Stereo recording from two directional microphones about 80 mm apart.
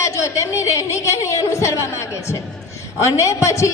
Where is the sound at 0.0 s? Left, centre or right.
Left.